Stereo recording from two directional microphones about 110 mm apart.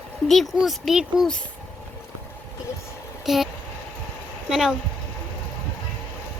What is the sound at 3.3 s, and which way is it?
Speech, centre (ahead or behind).